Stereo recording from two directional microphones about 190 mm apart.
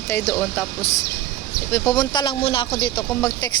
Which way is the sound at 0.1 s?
15° left (ahead or behind).